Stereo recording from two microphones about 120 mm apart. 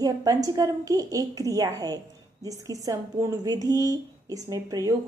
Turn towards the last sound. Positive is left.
turn(degrees=-30)  # may be behind; listen again after turning